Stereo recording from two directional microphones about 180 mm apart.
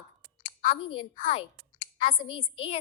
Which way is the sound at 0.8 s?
30° left (ahead or behind).